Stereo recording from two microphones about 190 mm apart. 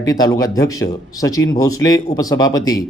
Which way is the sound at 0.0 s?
20° left (ahead or behind).